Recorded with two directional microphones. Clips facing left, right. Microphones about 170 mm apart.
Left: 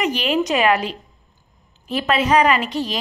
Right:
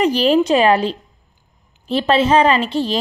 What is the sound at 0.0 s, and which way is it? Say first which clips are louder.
A woman's voice: right 6 dB; 35° right (ahead or behind).